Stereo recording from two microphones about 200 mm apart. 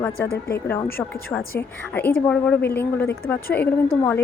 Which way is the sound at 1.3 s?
10° left (ahead or behind).